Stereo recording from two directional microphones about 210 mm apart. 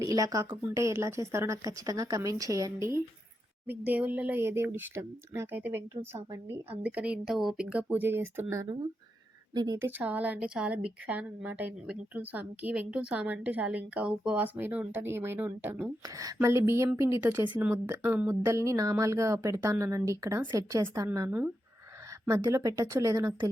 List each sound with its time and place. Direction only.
0.0 s a woman's voice: 15° right (ahead or behind)